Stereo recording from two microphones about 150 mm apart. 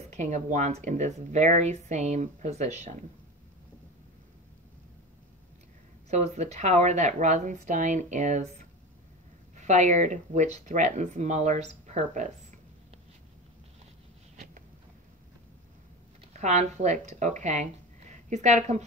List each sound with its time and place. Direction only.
0.1 s speech: 55° right (ahead or behind)
6.0 s speech: 50° right (ahead or behind)
14.3 s a sound: 55° right (ahead or behind)
16.3 s speech: 50° right (ahead or behind)